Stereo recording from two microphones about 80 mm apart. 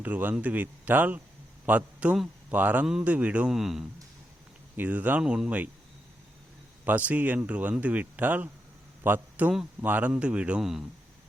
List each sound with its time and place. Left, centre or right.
0.0 s speech: right
2.8 s a man's voice: centre
3.1 s a man's voice: centre
3.5 s speech: centre
4.8 s a man's voice: right
6.8 s a man's voice: centre